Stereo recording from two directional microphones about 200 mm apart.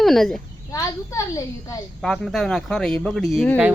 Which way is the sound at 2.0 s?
Centre (ahead or behind).